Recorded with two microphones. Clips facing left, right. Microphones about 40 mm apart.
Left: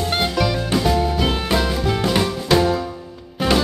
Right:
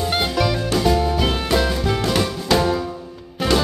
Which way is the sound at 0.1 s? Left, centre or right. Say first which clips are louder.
Left 1 dB; centre.